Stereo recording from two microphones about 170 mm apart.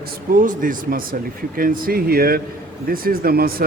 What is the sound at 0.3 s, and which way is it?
Speech, 50° right (ahead or behind).